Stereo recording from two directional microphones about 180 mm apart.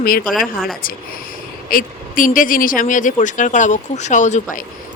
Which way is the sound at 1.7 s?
50° left (ahead or behind).